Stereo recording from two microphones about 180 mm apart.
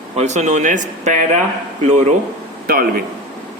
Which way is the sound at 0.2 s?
40° right (ahead or behind).